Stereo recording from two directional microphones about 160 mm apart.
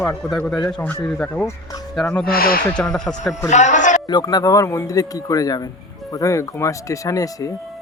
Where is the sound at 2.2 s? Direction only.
65° left (ahead or behind).